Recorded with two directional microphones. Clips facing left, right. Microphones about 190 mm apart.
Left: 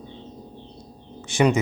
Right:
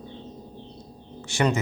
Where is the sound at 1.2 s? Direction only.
15° left (ahead or behind).